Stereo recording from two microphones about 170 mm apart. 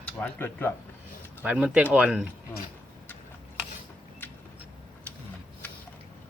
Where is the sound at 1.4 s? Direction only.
5° right (ahead or behind).